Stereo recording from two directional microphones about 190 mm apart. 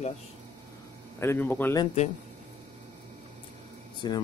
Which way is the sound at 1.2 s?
10° left (ahead or behind).